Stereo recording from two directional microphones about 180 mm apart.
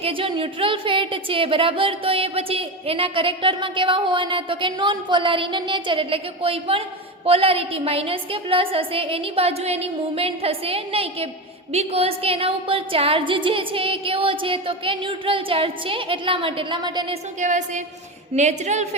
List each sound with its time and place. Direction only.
0.0 s a woman's voice: 30° right (ahead or behind)
17.4 s a woman's voice: 40° right (ahead or behind)